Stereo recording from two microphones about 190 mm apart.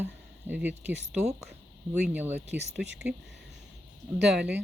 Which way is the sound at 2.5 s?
60° right (ahead or behind).